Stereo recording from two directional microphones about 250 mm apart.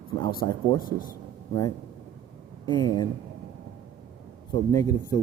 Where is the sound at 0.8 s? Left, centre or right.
Left.